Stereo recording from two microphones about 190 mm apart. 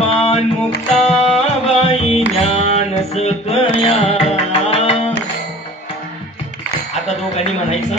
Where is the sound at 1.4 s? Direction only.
35° left (ahead or behind).